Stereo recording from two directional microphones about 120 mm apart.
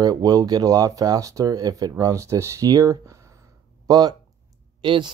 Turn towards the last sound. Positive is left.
turn(degrees=-40)  # may be behind; listen again after turning